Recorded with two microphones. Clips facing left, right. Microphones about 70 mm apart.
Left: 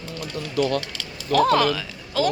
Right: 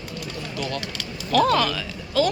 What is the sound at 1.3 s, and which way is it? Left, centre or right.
Speech, left.